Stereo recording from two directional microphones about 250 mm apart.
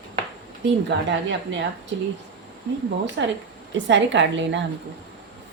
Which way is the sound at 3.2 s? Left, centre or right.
Right.